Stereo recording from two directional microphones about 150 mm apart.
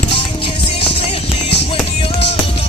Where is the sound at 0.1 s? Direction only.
35° left (ahead or behind).